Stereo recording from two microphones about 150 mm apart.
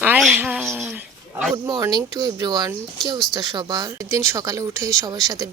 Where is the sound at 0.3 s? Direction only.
10° right (ahead or behind).